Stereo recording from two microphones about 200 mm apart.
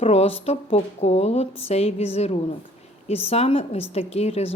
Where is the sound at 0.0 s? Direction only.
30° left (ahead or behind).